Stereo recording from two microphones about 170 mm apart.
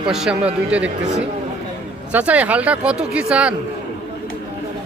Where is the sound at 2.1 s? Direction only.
10° right (ahead or behind).